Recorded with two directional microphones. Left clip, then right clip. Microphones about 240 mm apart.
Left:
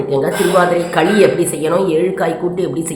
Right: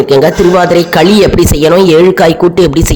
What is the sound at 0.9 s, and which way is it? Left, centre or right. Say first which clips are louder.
A woman's voice: right 4 dB; right.